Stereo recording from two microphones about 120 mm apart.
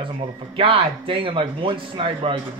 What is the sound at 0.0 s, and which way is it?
Speech, 50° right (ahead or behind).